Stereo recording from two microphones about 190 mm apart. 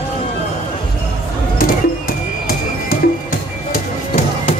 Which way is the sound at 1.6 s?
45° left (ahead or behind).